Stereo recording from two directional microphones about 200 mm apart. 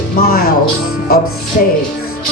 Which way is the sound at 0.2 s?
50° left (ahead or behind).